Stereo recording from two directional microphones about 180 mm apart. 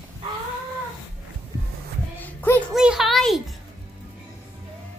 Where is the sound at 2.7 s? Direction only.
5° right (ahead or behind).